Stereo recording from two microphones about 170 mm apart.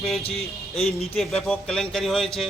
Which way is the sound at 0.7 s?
35° left (ahead or behind).